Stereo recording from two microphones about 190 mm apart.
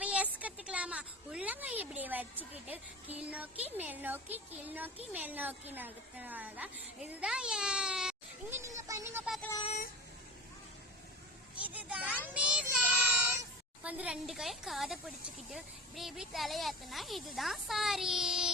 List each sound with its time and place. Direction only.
0.0 s a sound: 5° right (ahead or behind)
3.2 s a woman's voice: 10° right (ahead or behind)
9.2 s speech: centre (ahead or behind)
9.6 s a sound: 40° left (ahead or behind)
11.6 s a woman's voice: 5° right (ahead or behind)
13.8 s speech: 5° right (ahead or behind)